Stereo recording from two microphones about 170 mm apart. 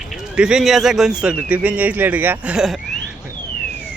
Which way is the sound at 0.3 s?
5° right (ahead or behind).